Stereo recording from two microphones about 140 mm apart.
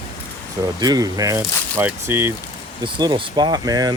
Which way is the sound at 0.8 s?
25° right (ahead or behind).